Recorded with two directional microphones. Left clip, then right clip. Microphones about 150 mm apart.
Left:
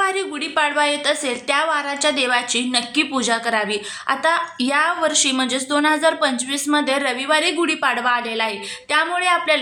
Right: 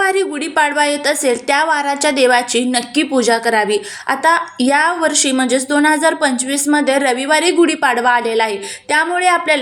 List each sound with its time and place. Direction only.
0.0 s a woman's voice: 15° right (ahead or behind)